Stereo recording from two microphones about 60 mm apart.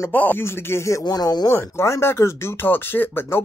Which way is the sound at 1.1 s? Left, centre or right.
Left.